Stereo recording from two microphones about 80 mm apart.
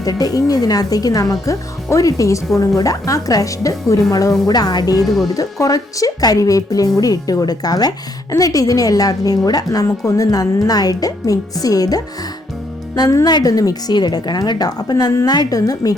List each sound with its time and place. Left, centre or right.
0.0 s a woman's voice: left
4.4 s a woman's voice: left